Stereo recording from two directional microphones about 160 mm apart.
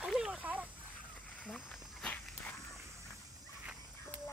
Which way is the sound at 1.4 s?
5° left (ahead or behind).